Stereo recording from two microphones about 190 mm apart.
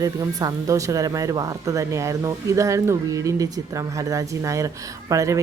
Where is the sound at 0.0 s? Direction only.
20° right (ahead or behind).